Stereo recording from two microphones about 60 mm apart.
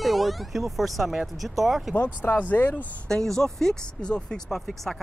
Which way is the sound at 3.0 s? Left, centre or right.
Centre.